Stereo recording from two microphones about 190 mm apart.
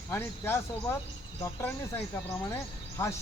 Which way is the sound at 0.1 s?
15° left (ahead or behind).